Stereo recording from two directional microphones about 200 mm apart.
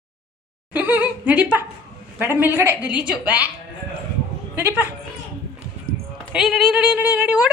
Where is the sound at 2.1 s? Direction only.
10° right (ahead or behind).